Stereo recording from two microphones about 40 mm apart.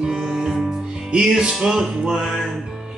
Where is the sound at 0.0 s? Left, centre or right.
Centre.